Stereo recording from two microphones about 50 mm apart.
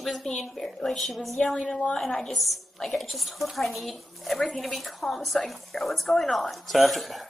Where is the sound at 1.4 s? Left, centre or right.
Left.